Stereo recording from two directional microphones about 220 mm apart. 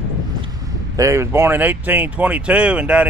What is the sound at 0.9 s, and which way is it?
Speech, 15° right (ahead or behind).